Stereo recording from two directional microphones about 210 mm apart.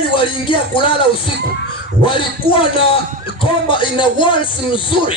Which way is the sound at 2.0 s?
25° left (ahead or behind).